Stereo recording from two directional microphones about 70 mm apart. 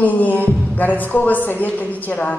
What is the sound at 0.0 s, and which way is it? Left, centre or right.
Speech, left.